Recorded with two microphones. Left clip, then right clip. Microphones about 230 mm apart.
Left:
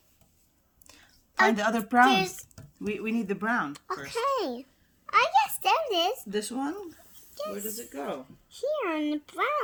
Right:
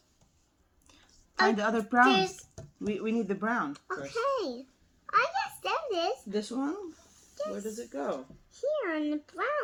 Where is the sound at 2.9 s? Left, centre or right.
Left.